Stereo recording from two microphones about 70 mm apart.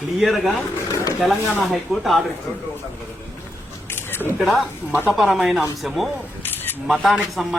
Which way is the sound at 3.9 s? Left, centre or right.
Left.